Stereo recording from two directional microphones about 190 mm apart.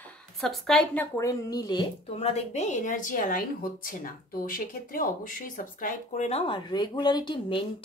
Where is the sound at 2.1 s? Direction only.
35° left (ahead or behind).